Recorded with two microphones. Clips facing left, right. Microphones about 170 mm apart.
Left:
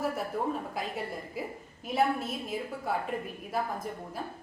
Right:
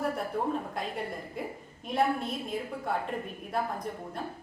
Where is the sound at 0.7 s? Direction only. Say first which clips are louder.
Even; 5° left (ahead or behind).